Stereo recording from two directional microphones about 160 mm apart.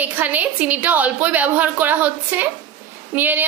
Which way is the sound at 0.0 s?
10° right (ahead or behind).